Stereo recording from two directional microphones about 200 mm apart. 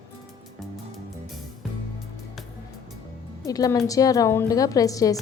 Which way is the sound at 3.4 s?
15° left (ahead or behind).